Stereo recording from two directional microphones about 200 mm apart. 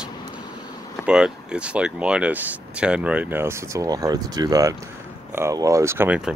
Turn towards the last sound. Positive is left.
turn(degrees=-10)  # may be behind; listen again after turning